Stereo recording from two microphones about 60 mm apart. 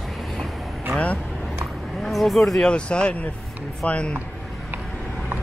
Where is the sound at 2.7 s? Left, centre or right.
Centre.